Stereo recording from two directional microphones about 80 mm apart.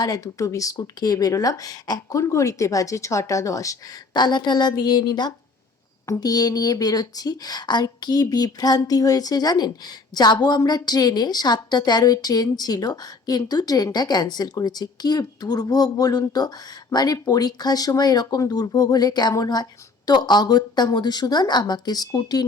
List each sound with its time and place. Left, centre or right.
0.0 s speech: left
4.1 s a woman's voice: left
6.1 s a woman's voice: left